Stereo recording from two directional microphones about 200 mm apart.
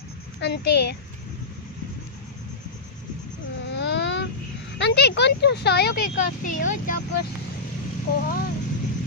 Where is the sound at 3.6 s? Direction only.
60° left (ahead or behind).